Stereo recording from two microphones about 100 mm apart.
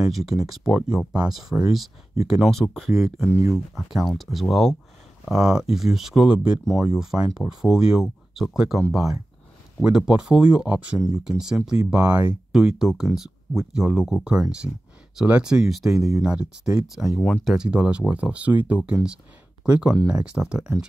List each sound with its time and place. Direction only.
0.1 s speech: centre (ahead or behind)
0.9 s speech: 45° right (ahead or behind)
1.3 s speech: 5° right (ahead or behind)
17.6 s speech: 10° right (ahead or behind)